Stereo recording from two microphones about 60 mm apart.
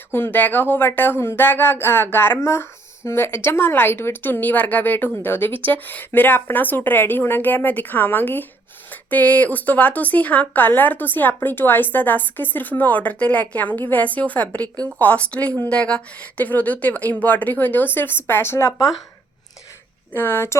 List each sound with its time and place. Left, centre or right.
0.1 s speech: left
20.1 s speech: left